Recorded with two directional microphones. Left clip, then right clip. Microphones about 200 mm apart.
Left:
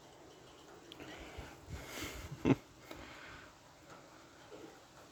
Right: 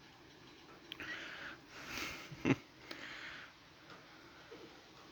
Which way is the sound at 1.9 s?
15° left (ahead or behind).